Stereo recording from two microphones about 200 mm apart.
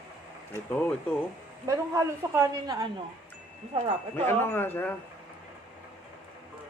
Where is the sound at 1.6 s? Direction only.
15° right (ahead or behind).